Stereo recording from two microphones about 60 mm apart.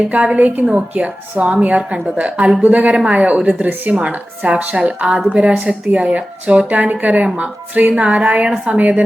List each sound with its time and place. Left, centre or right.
0.3 s a woman's voice: right